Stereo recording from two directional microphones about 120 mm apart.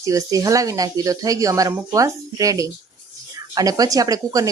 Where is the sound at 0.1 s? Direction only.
30° right (ahead or behind).